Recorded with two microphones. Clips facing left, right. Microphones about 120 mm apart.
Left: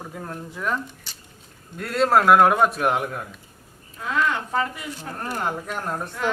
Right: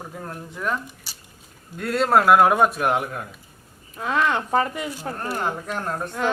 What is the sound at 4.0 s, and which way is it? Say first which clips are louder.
Speech: right 2 dB; 45° right (ahead or behind).